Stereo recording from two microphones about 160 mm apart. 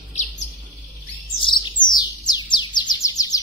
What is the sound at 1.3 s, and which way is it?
Bird, 30° left (ahead or behind).